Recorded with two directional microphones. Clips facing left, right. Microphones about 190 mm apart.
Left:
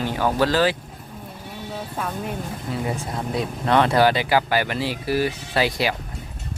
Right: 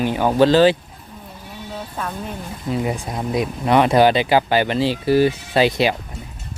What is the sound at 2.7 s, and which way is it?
Speech, 15° right (ahead or behind).